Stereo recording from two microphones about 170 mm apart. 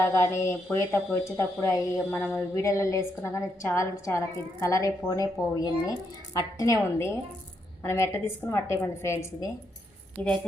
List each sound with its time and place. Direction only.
0.0 s a woman's voice: 15° left (ahead or behind)